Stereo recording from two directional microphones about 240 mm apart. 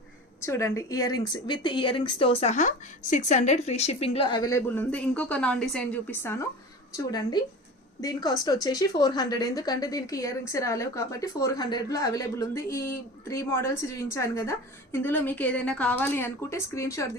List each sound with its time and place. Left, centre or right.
0.4 s speech: centre